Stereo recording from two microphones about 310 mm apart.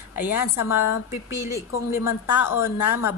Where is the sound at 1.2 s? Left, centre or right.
Centre.